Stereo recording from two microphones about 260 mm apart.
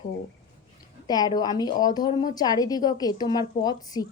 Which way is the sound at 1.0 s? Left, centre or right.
Centre.